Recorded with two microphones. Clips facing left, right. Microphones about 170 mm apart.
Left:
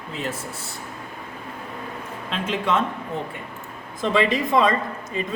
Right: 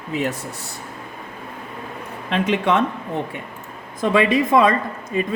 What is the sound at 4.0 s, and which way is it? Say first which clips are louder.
Speech: right 4 dB; 50° right (ahead or behind).